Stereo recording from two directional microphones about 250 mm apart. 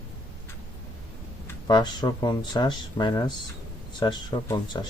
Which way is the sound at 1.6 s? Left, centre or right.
Centre.